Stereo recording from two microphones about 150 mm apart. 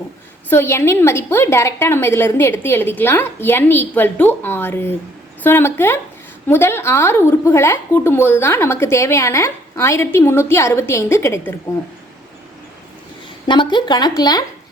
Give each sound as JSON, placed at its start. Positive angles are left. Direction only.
{"t": 0.5, "sound": "a woman's voice", "side_deg": 15}
{"t": 13.5, "sound": "speech", "side_deg": 30}